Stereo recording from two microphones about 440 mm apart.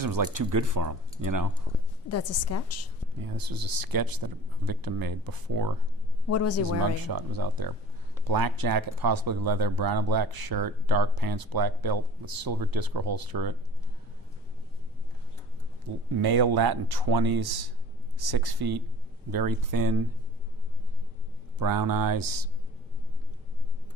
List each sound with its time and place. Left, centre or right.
0.0 s speech: right
2.0 s a woman's voice: left
3.2 s speech: right
6.2 s a woman's voice: left
6.7 s speech: right
16.1 s speech: right
21.6 s speech: right